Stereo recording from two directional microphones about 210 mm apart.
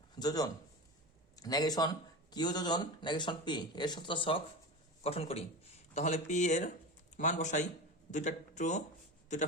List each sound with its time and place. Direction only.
0.2 s a man's voice: 20° left (ahead or behind); by 8.8 s 35° left (ahead or behind)